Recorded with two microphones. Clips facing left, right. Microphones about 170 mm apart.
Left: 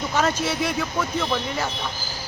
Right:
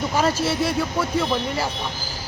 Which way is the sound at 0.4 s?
5° right (ahead or behind).